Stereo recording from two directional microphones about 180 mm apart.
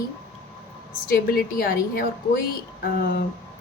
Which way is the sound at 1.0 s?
55° left (ahead or behind).